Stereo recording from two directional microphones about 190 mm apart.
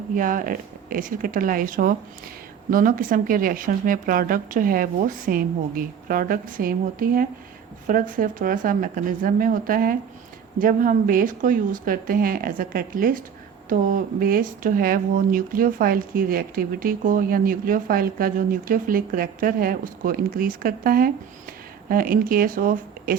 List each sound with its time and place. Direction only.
0.2 s speech: 45° right (ahead or behind)